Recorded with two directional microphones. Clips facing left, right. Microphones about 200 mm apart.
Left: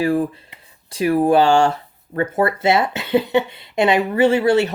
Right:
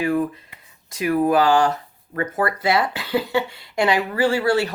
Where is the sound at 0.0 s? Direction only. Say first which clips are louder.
Left 3 dB; 30° left (ahead or behind).